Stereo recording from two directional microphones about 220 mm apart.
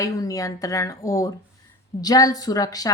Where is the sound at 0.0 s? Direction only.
15° left (ahead or behind).